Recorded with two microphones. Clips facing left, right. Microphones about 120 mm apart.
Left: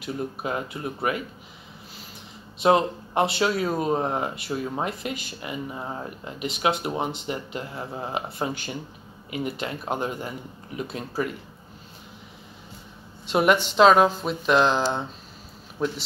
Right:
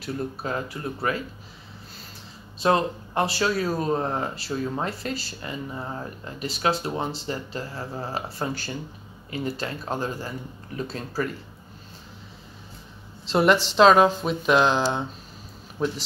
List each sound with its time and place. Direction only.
0.0 s speech: 15° left (ahead or behind)
2.6 s speech: 20° left (ahead or behind)
13.3 s speech: 10° left (ahead or behind)